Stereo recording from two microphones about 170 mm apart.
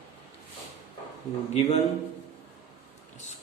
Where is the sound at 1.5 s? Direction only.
40° left (ahead or behind).